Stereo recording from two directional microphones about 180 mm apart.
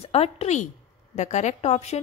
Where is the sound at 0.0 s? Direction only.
35° left (ahead or behind).